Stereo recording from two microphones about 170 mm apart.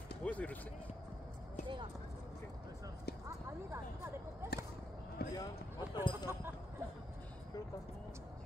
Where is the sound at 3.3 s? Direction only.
15° right (ahead or behind).